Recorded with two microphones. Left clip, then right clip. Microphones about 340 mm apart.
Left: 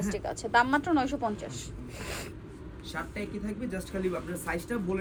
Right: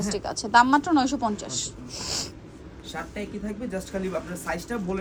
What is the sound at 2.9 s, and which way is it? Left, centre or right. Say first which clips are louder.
A man's voice: right 3 dB; centre.